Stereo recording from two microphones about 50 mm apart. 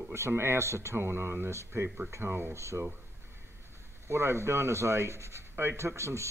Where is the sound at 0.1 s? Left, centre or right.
Right.